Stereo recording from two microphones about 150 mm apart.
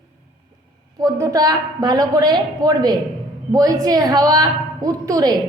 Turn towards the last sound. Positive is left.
turn(degrees=-25)  # may be behind; listen again after turning